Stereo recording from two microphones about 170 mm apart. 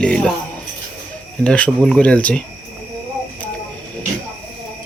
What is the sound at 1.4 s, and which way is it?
Speech, 5° left (ahead or behind).